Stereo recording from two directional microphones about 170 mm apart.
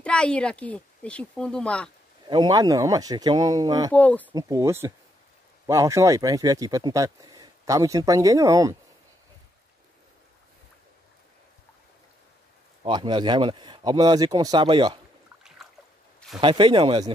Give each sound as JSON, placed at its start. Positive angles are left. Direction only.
{"t": 0.0, "sound": "a woman's voice", "side_deg": 5}
{"t": 2.2, "sound": "speech", "side_deg": -25}
{"t": 3.9, "sound": "a woman's voice", "side_deg": 10}
{"t": 4.3, "sound": "speech", "side_deg": -20}
{"t": 12.8, "sound": "speech", "side_deg": -25}
{"t": 15.4, "sound": "boat", "side_deg": 0}
{"t": 16.3, "sound": "speech", "side_deg": -30}